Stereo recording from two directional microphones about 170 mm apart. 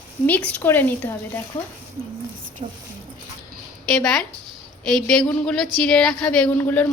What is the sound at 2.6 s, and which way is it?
Speech, 30° right (ahead or behind).